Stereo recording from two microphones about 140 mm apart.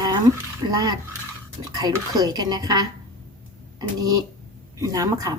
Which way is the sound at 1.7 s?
30° right (ahead or behind).